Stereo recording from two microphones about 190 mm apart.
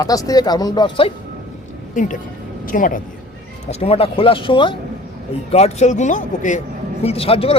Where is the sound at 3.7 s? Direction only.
30° left (ahead or behind).